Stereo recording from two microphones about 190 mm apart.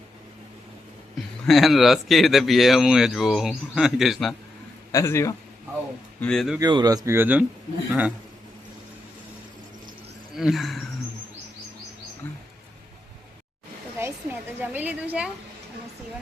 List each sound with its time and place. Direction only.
1.5 s a man's voice: centre (ahead or behind)
4.9 s a man's voice: 15° left (ahead or behind)
6.1 s a man's voice: 5° left (ahead or behind)
6.6 s speech: 20° right (ahead or behind)
10.3 s a man's voice: centre (ahead or behind)
14.0 s a sound: 10° right (ahead or behind)